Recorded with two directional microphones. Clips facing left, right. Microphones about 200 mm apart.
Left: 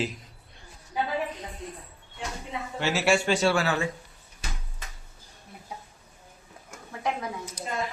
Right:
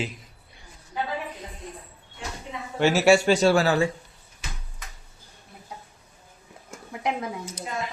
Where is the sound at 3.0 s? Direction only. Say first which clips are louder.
Right 5 dB; 40° right (ahead or behind).